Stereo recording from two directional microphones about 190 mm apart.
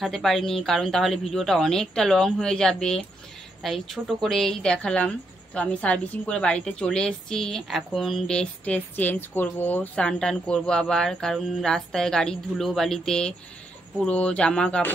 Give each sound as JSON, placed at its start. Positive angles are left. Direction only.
{"t": 0.0, "sound": "speech", "side_deg": 0}